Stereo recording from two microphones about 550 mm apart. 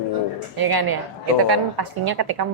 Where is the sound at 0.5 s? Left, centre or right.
Right.